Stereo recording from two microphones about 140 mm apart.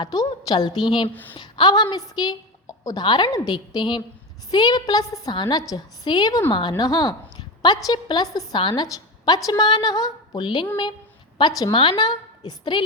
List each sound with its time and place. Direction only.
0.0 s a woman's voice: 25° left (ahead or behind)